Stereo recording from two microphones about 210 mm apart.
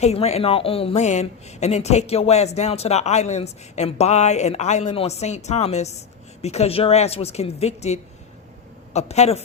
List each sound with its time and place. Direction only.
0.0 s speech: 30° left (ahead or behind)